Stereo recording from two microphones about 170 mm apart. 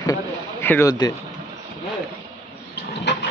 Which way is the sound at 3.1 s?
90° left.